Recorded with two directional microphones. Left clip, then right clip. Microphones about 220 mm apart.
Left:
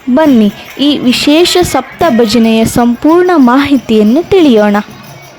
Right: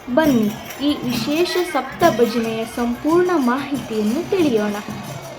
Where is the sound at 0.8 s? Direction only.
50° left (ahead or behind).